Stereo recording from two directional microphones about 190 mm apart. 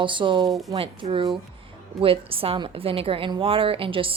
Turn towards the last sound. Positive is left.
turn(degrees=-30)  # may be behind; listen again after turning